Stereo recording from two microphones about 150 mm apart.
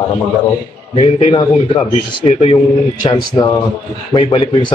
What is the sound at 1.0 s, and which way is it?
A man's voice, 45° left (ahead or behind).